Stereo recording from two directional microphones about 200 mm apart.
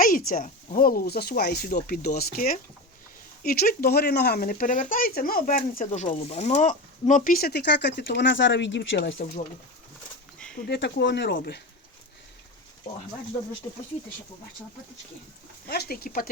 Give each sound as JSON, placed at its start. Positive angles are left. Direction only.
{"t": 0.3, "sound": "speech", "side_deg": 40}
{"t": 10.7, "sound": "speech", "side_deg": 55}
{"t": 13.7, "sound": "speech", "side_deg": 20}
{"t": 15.7, "sound": "speech", "side_deg": 50}